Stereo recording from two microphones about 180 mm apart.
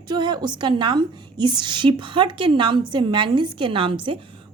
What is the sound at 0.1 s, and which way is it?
A woman's voice, 25° right (ahead or behind).